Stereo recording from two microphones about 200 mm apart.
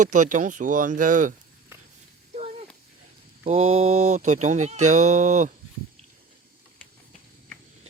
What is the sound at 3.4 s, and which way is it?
Speech, 30° right (ahead or behind).